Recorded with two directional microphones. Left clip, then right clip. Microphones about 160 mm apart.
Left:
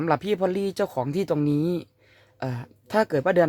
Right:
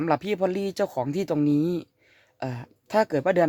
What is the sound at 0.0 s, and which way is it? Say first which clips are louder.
Speech: left 1 dB; 15° right (ahead or behind).